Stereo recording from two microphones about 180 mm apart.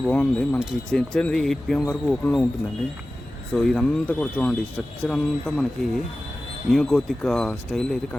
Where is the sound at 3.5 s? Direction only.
5° left (ahead or behind).